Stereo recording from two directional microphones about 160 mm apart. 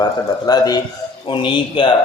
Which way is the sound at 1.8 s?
35° left (ahead or behind).